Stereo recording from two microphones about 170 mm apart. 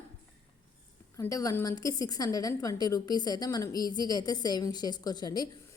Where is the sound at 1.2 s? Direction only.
20° left (ahead or behind).